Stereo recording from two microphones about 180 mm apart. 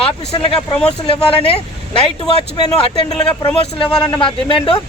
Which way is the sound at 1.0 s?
30° left (ahead or behind).